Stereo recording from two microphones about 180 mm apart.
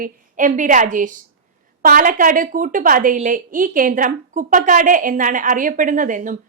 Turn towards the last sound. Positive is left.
turn(degrees=-45)  # may be behind; listen again after turning